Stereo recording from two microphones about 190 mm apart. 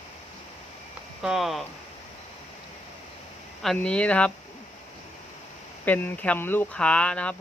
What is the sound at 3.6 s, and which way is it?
Speech, 5° left (ahead or behind).